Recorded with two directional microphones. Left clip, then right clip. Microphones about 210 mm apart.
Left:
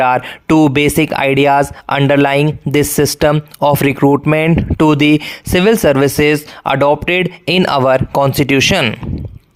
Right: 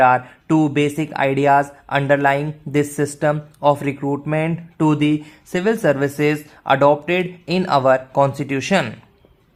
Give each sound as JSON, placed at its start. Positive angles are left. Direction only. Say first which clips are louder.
{"t": 0.0, "sound": "speech", "louder": "left 2 dB", "side_deg": 45}